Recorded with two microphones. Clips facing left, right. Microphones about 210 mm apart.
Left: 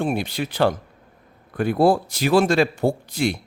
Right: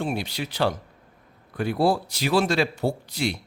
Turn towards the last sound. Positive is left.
turn(degrees=50)  # may be behind; listen again after turning